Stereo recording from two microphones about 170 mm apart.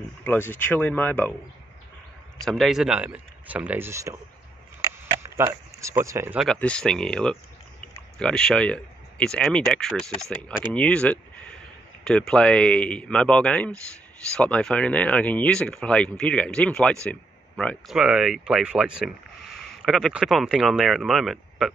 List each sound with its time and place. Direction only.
0.2 s speech: 10° left (ahead or behind)
2.4 s speech: centre (ahead or behind); by 4.2 s 15° right (ahead or behind)
4.8 s a sound: 20° right (ahead or behind)
6.3 s speech: 5° left (ahead or behind)